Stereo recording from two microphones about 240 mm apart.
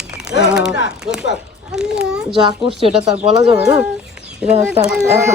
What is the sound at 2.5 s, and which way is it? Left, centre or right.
Speech, right.